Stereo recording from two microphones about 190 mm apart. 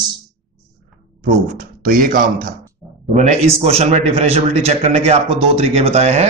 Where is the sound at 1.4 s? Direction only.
45° right (ahead or behind).